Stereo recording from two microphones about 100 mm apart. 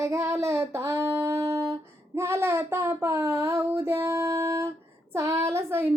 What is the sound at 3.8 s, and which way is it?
Music, 25° right (ahead or behind).